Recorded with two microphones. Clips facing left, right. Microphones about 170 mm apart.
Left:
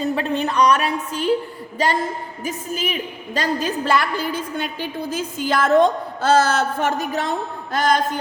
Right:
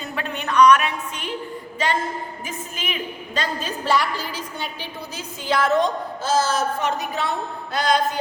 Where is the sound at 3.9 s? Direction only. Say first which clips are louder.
Even; 55° left (ahead or behind).